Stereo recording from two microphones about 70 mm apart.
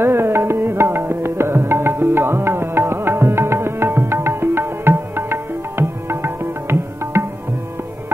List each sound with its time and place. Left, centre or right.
0.0 s music: right